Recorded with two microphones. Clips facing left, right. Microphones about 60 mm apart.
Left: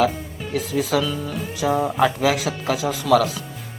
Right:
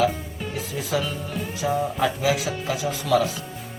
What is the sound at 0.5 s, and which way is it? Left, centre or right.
Speech, left.